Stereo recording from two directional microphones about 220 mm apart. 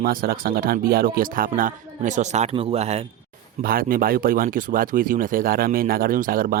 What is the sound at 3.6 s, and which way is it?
Speech, 40° right (ahead or behind).